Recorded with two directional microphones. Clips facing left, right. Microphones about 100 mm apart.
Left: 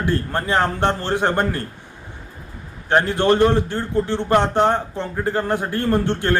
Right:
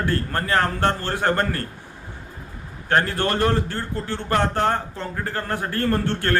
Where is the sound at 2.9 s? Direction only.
20° left (ahead or behind).